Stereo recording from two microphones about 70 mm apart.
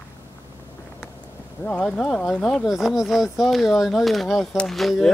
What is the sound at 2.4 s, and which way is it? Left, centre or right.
Speech, centre.